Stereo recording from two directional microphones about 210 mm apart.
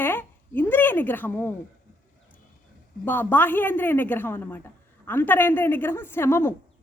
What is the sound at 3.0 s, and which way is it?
A woman's voice, 10° left (ahead or behind).